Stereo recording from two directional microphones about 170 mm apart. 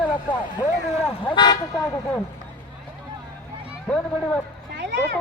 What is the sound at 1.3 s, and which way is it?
Speech, 25° left (ahead or behind).